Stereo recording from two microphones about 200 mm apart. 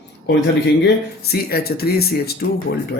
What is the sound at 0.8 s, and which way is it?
Speech, 50° left (ahead or behind).